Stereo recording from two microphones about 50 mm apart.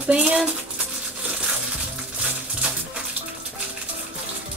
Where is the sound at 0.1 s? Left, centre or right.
Centre.